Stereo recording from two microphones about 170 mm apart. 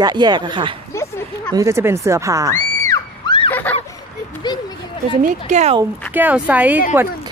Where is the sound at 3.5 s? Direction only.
10° left (ahead or behind).